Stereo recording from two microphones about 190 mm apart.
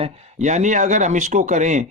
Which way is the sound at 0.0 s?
35° right (ahead or behind).